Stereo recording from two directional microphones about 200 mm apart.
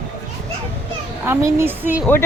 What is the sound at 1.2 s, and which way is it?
Speech, 10° right (ahead or behind).